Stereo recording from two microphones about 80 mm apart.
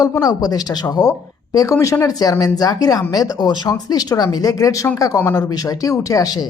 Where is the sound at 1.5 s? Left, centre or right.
Left.